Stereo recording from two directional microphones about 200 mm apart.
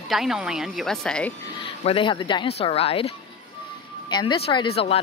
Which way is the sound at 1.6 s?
25° left (ahead or behind).